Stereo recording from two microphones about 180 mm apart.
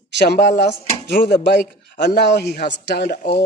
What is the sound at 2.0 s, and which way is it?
Cutlery, 70° left (ahead or behind).